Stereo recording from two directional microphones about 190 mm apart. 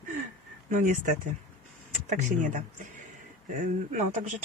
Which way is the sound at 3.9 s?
40° right (ahead or behind).